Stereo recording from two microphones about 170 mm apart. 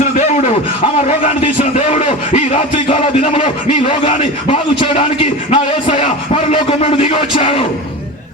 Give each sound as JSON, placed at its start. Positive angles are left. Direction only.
{"t": 1.0, "sound": "music", "side_deg": 40}